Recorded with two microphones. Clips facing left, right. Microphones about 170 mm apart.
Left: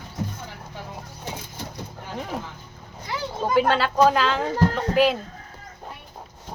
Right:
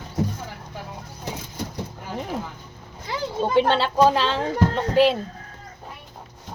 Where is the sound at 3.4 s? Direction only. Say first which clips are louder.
Even; 30° right (ahead or behind).